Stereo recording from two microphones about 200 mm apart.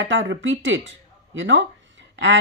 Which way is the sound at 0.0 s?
70° right (ahead or behind).